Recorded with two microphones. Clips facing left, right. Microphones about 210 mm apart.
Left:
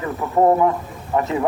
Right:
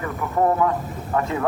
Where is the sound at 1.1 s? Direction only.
20° left (ahead or behind).